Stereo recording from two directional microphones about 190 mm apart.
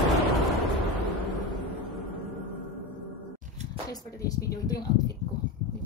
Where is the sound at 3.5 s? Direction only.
35° right (ahead or behind).